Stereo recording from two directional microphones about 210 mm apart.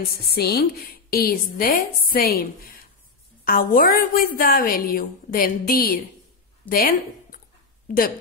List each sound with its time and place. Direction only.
0.2 s a woman's voice: 50° left (ahead or behind)